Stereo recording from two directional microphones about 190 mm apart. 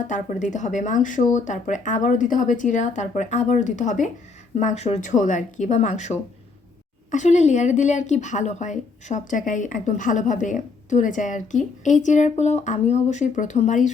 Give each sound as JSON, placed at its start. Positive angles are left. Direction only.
{"t": 0.1, "sound": "a woman's voice", "side_deg": 40}